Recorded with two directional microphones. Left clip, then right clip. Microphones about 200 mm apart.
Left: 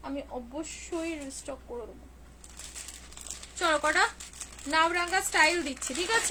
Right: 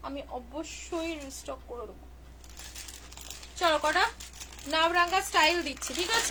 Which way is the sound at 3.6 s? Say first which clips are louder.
Even; 20° left (ahead or behind).